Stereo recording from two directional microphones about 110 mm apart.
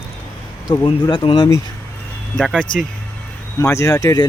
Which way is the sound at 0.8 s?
45° left (ahead or behind).